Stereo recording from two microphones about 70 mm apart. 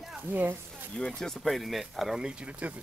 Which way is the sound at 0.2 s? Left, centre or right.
Right.